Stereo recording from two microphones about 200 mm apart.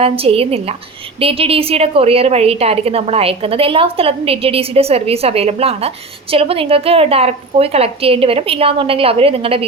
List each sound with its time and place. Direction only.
0.0 s a woman's voice: 30° right (ahead or behind)